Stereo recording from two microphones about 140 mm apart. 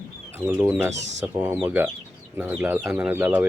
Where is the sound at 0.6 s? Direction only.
10° right (ahead or behind).